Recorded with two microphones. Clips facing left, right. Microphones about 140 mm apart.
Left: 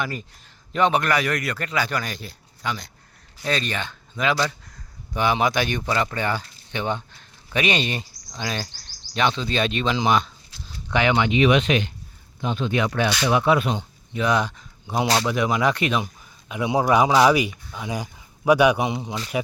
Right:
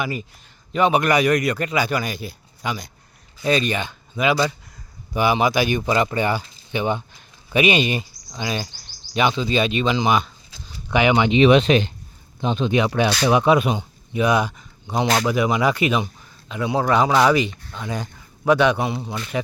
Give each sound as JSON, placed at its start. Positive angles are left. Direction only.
{"t": 0.0, "sound": "speech", "side_deg": -10}
{"t": 10.9, "sound": "speech", "side_deg": -15}
{"t": 11.3, "sound": "speech", "side_deg": -30}
{"t": 12.4, "sound": "speech", "side_deg": -20}
{"t": 14.9, "sound": "speech", "side_deg": 0}
{"t": 16.5, "sound": "speech", "side_deg": 15}